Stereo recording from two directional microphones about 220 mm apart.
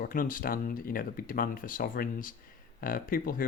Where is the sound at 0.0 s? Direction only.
40° left (ahead or behind).